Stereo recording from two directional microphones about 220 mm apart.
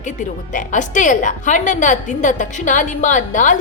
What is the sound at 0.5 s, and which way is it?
A woman's voice, 35° left (ahead or behind).